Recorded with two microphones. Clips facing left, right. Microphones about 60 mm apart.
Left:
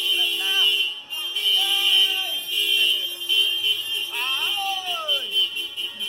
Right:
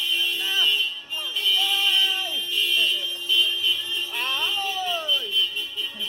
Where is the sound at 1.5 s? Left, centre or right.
Right.